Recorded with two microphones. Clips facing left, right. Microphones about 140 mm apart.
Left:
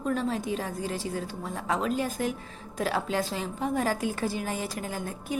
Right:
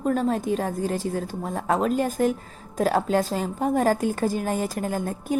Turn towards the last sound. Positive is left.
turn(degrees=-45)  # may be behind; listen again after turning